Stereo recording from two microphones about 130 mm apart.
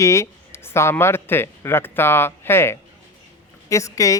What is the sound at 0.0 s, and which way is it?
A woman's voice, 25° left (ahead or behind).